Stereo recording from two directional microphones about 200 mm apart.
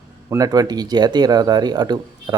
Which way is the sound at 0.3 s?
20° right (ahead or behind).